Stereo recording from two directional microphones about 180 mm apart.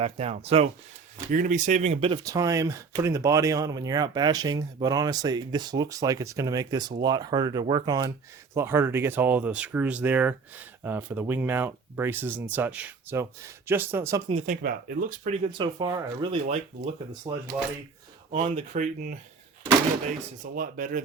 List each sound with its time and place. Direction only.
0.0 s speech: 35° right (ahead or behind)
1.3 s speech: 45° right (ahead or behind)
2.2 s speech: 20° right (ahead or behind)
14.3 s speech: 35° right (ahead or behind)
14.5 s speech: 55° right (ahead or behind)
15.5 s speech: 25° right (ahead or behind); by 19.1 s 45° right (ahead or behind)
20.4 s speech: 50° right (ahead or behind)